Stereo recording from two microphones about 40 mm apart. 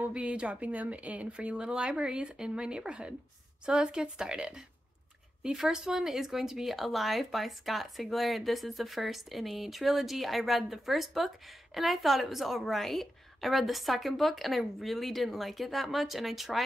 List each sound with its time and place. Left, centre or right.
0.1 s a woman's voice: right; by 16.6 s centre